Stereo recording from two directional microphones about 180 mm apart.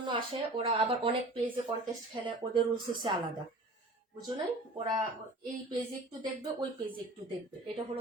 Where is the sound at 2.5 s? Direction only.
25° right (ahead or behind).